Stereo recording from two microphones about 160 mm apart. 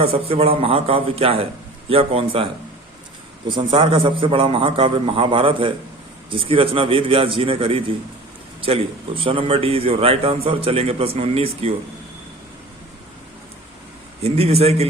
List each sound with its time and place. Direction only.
0.0 s a man's voice: 40° right (ahead or behind)
14.2 s a man's voice: 40° right (ahead or behind)